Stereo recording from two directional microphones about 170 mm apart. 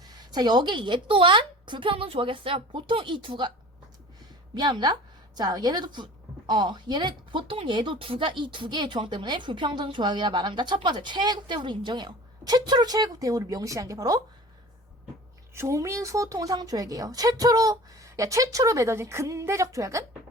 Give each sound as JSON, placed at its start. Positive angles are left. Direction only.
{"t": 0.0, "sound": "speech", "side_deg": -25}
{"t": 4.5, "sound": "a woman's voice", "side_deg": -25}
{"t": 15.5, "sound": "speech", "side_deg": -15}